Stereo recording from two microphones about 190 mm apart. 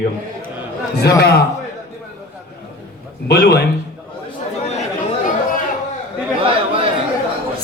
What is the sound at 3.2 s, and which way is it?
Speech, 60° left (ahead or behind).